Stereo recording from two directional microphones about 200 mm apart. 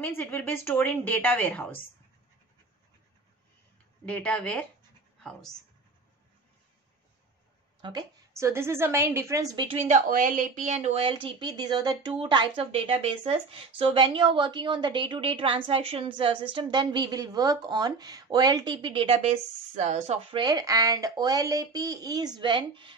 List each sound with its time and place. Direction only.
0.0 s a woman's voice: 10° left (ahead or behind)
4.0 s speech: 5° left (ahead or behind)
7.8 s a woman's voice: 15° right (ahead or behind)